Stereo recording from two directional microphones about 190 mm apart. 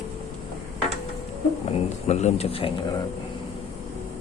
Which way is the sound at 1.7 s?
35° left (ahead or behind).